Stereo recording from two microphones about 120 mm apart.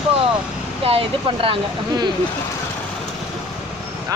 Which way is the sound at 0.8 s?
50° right (ahead or behind).